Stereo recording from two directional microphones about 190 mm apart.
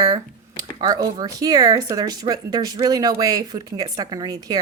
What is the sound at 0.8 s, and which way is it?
A woman's voice, 20° right (ahead or behind).